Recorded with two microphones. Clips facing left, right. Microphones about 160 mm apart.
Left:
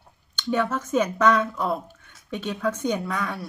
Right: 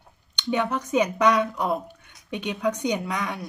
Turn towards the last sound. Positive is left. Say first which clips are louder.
# even
turn(degrees=-15)  # may be behind; listen again after turning